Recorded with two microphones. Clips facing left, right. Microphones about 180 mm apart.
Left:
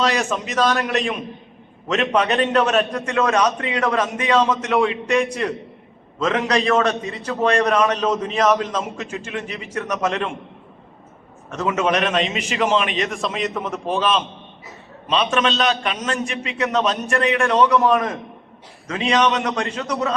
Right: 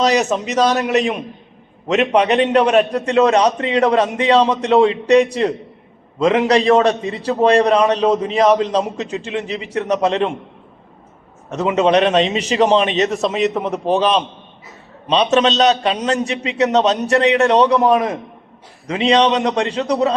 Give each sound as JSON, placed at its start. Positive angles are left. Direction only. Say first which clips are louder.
{"t": 0.0, "sound": "a man's voice", "louder": "right 5 dB", "side_deg": -40}
{"t": 1.9, "sound": "a man's voice", "louder": "right 5 dB", "side_deg": -20}
{"t": 3.3, "sound": "a man's voice", "louder": "right 5 dB", "side_deg": -30}
{"t": 11.4, "sound": "a man's voice", "louder": "right 5 dB", "side_deg": -30}